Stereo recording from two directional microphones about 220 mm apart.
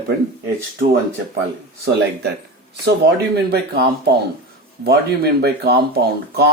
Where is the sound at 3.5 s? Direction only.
45° right (ahead or behind).